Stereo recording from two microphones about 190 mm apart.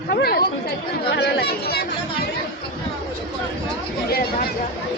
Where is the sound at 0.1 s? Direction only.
55° left (ahead or behind).